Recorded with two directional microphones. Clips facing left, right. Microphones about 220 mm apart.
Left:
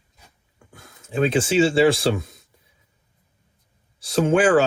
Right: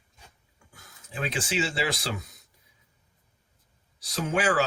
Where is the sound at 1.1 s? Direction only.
25° left (ahead or behind).